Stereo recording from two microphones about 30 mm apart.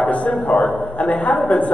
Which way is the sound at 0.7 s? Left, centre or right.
Left.